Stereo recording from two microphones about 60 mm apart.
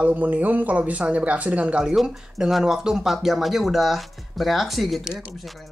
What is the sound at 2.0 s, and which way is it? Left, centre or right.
Speech, centre.